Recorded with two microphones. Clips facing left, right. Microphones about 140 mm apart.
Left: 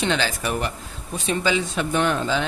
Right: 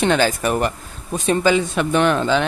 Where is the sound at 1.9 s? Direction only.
75° right (ahead or behind).